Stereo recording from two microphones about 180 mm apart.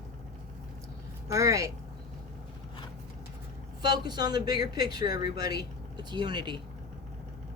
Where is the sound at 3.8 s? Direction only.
25° right (ahead or behind).